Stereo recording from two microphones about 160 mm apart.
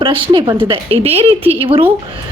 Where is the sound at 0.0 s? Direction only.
30° right (ahead or behind).